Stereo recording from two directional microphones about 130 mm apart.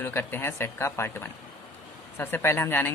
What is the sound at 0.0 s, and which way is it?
Speech, 15° left (ahead or behind).